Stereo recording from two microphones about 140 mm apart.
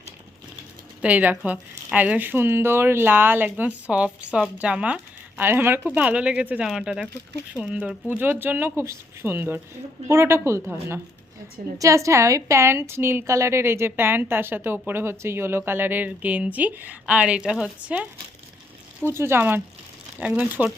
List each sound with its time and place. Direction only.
1.0 s a woman's voice: 10° right (ahead or behind)